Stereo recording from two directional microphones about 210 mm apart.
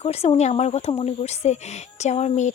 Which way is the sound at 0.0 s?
30° left (ahead or behind).